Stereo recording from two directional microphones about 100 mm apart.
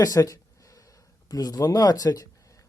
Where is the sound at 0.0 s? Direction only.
35° left (ahead or behind).